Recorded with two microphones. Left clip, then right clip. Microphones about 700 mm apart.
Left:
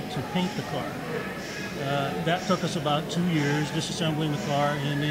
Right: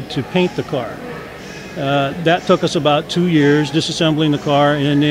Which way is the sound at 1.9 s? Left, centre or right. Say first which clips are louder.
Right 12 dB; right.